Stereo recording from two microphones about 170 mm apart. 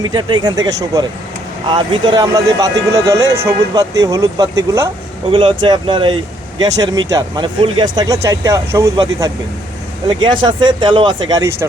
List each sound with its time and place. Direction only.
0.0 s speech: 25° right (ahead or behind)
5.3 s speech: 30° right (ahead or behind)